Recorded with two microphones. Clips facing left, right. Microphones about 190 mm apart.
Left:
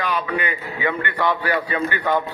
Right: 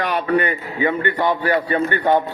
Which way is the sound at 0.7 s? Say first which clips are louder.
Right 4 dB; 25° right (ahead or behind).